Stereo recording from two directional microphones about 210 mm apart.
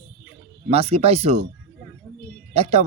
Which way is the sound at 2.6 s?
30° right (ahead or behind).